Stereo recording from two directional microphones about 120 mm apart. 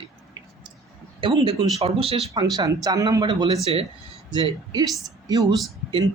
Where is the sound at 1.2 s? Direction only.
45° right (ahead or behind).